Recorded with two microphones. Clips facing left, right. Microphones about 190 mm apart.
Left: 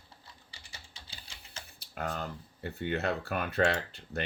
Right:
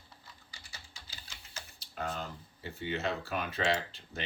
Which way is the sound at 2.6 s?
60° left (ahead or behind).